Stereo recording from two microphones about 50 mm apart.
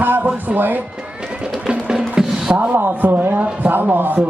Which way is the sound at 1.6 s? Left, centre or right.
Centre.